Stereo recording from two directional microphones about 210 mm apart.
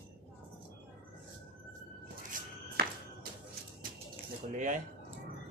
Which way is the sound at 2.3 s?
40° right (ahead or behind).